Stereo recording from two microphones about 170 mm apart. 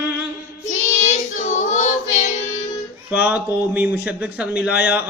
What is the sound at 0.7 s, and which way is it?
Child singing, 45° left (ahead or behind).